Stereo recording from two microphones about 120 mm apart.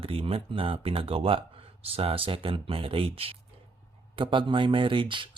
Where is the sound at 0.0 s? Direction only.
50° right (ahead or behind).